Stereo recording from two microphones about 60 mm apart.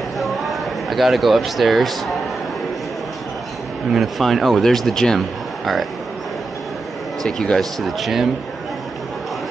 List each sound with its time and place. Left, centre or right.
0.2 s a sound: centre
3.9 s speech: centre
7.2 s speech: centre